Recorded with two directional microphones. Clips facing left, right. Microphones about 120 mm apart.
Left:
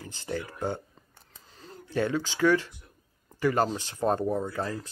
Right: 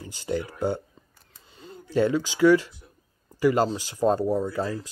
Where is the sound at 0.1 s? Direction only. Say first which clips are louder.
Right 6 dB; 15° right (ahead or behind).